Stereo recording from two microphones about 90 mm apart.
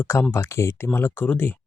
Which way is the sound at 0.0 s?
25° left (ahead or behind).